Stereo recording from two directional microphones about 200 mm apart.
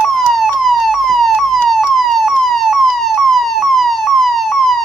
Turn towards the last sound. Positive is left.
turn(degrees=0)  # may be behind; listen again after turning